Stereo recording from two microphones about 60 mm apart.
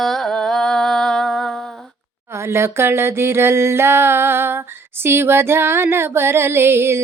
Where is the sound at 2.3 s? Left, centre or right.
Right.